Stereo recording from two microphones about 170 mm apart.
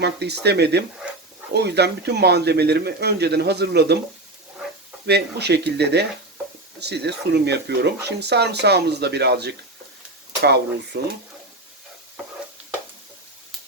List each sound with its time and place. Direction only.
0.0 s speech: 75° right (ahead or behind)
5.0 s speech: 75° right (ahead or behind)